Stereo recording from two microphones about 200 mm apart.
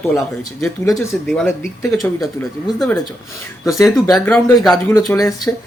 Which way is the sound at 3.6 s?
15° left (ahead or behind).